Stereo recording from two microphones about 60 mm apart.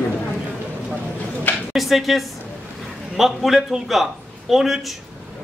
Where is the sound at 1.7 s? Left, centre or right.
Centre.